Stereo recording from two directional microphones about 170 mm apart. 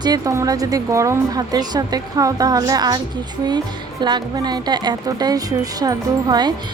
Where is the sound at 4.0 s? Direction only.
25° right (ahead or behind).